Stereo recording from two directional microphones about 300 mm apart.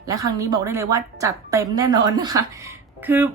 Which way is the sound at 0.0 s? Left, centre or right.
Centre.